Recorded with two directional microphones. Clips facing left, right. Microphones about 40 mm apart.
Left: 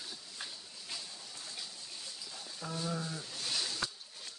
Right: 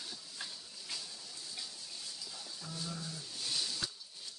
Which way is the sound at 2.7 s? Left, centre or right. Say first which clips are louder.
Left 6 dB; left.